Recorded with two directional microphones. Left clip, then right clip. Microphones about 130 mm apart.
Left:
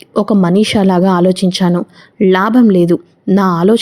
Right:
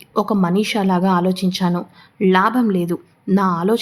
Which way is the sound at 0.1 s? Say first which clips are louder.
Left 6 dB; 25° left (ahead or behind).